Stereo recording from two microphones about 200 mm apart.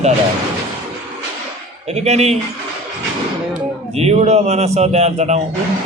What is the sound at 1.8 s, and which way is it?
Speech, 35° right (ahead or behind).